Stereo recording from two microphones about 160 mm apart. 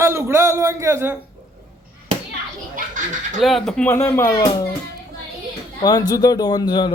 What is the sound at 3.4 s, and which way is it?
Speech, centre (ahead or behind).